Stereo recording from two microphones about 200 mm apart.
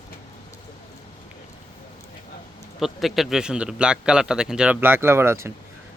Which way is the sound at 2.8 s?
Centre (ahead or behind).